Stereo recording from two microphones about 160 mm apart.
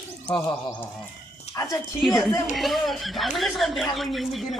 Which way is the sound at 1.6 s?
20° left (ahead or behind).